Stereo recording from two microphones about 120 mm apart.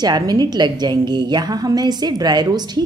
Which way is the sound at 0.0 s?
35° right (ahead or behind).